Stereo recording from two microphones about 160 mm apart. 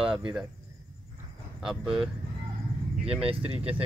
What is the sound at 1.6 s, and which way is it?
Speech, 5° right (ahead or behind).